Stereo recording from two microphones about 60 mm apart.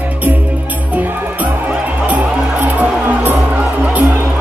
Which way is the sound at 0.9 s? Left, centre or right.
Right.